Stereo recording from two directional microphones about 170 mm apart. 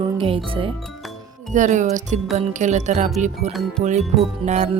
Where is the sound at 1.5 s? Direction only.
45° right (ahead or behind).